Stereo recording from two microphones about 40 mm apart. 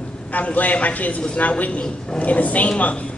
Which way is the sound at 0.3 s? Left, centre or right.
Left.